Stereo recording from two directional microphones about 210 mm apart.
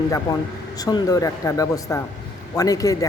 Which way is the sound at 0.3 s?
15° left (ahead or behind).